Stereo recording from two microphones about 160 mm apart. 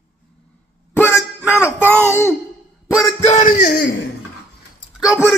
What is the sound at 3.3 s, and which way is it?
Speech, 50° left (ahead or behind).